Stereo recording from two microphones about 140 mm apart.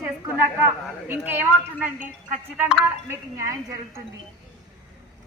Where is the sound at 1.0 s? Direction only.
15° right (ahead or behind).